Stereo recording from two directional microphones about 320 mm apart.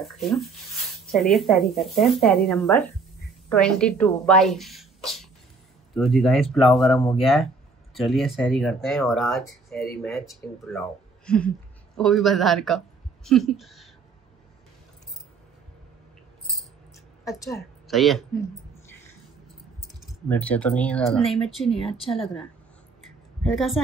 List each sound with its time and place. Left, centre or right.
0.0 s a woman's voice: centre
17.8 s speech: centre
20.2 s speech: centre
21.8 s speech: centre
23.5 s speech: centre